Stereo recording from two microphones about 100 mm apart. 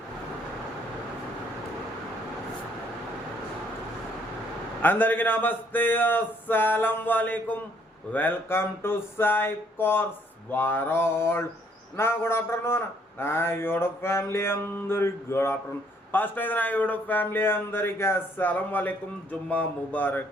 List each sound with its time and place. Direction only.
4.8 s a man's voice: 20° left (ahead or behind)